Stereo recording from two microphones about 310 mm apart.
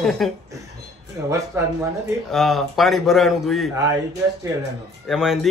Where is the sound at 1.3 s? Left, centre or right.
Centre.